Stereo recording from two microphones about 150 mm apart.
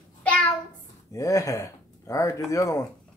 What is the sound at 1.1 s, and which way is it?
Speech, 20° left (ahead or behind).